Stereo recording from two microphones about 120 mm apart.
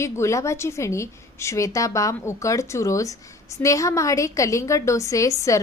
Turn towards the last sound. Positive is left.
turn(degrees=25)  # may be behind; listen again after turning